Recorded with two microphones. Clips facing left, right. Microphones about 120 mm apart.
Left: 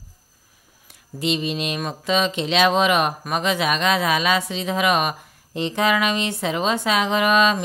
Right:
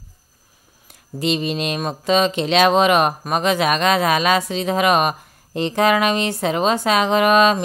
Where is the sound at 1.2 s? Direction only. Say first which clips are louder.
Right 3 dB; 45° right (ahead or behind).